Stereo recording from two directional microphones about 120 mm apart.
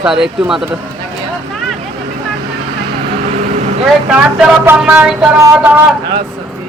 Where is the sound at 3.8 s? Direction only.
5° right (ahead or behind).